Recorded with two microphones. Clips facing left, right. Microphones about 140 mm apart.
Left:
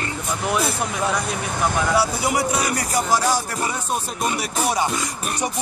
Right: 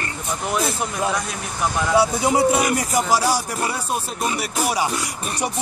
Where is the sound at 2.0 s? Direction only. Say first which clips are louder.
Right 4 dB; 25° right (ahead or behind).